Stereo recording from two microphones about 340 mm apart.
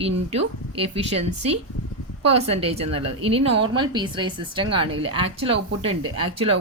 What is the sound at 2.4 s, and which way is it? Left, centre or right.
Speech, centre.